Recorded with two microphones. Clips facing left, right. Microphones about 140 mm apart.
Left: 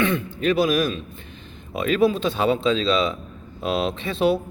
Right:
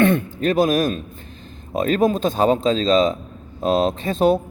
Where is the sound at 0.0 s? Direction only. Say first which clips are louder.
Right 5 dB; 55° right (ahead or behind).